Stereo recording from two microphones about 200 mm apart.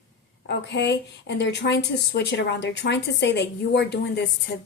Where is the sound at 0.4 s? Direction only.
60° left (ahead or behind).